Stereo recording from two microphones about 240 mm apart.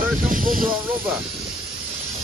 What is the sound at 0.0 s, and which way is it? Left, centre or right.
Hiss, right.